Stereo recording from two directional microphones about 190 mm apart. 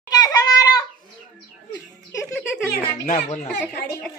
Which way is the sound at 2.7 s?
40° left (ahead or behind).